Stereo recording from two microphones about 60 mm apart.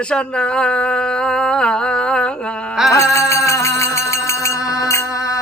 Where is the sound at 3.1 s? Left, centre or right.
Left.